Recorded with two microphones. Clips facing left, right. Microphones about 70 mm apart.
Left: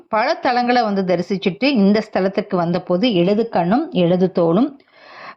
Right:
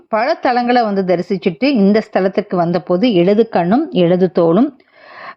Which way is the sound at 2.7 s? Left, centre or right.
Right.